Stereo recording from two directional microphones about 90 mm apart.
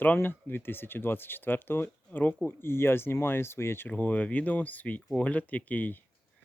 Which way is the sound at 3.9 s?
15° left (ahead or behind).